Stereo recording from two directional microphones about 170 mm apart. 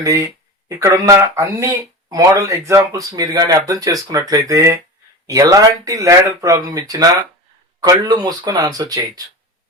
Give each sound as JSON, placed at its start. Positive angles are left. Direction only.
{"t": 0.0, "sound": "speech", "side_deg": -20}